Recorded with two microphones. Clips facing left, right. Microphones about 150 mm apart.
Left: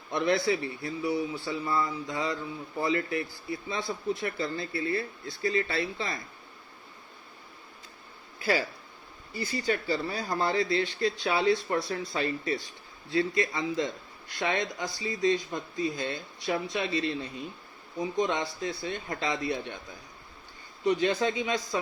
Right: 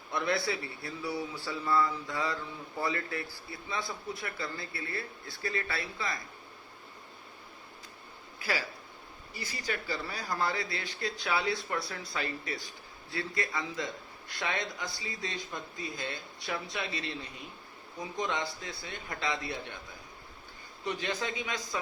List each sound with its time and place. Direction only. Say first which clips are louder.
0.1 s speech: left 5 dB; 20° left (ahead or behind)
9.4 s speech: left 8 dB; 25° left (ahead or behind)
20.8 s speech: left 9 dB; 25° left (ahead or behind)